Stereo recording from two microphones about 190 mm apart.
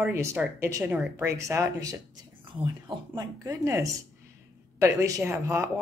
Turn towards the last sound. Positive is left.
turn(degrees=-15)  # may be behind; listen again after turning